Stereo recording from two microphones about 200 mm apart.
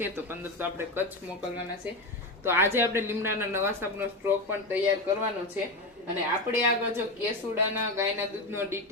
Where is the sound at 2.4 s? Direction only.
10° right (ahead or behind).